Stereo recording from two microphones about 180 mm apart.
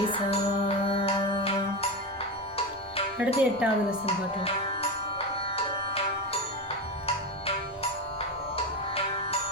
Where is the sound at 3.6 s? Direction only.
5° right (ahead or behind).